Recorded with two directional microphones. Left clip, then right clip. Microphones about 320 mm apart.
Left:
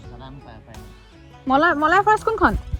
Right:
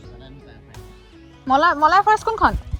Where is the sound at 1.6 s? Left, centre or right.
Centre.